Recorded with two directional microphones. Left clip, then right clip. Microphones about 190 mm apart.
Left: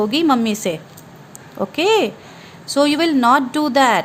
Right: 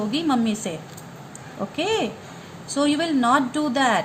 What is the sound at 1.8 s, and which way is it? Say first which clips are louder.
A woman's voice: left 8 dB; 55° left (ahead or behind).